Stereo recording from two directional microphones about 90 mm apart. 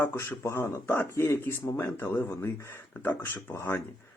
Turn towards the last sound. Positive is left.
turn(degrees=25)  # may be behind; listen again after turning